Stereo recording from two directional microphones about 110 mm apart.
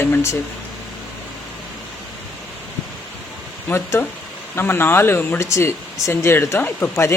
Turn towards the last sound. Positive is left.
turn(degrees=25)  # may be behind; listen again after turning